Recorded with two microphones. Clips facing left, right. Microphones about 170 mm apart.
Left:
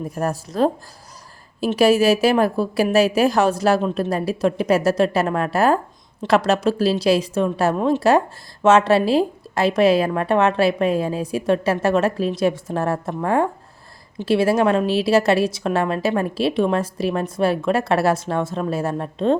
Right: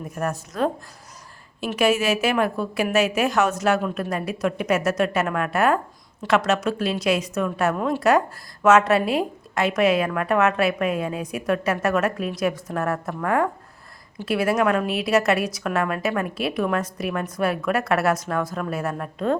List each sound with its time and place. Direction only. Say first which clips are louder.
0.2 s a woman's voice: left 4 dB; 30° left (ahead or behind)